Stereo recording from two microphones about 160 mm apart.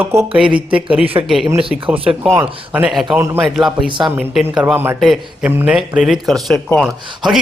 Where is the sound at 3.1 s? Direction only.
15° right (ahead or behind).